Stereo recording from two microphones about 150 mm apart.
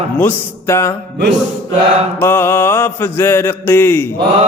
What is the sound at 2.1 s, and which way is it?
Mantra, 15° left (ahead or behind).